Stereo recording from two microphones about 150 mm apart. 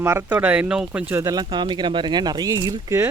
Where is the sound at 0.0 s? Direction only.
15° right (ahead or behind).